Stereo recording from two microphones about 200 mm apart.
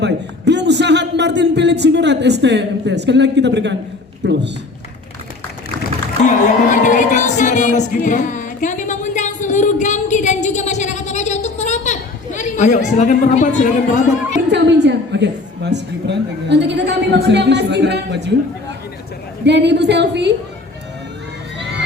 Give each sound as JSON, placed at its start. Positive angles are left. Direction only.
{"t": 0.0, "sound": "a man's voice", "side_deg": -60}
{"t": 6.2, "sound": "music", "side_deg": 40}
{"t": 14.3, "sound": "a woman's voice", "side_deg": -60}
{"t": 19.5, "sound": "a woman's voice", "side_deg": -60}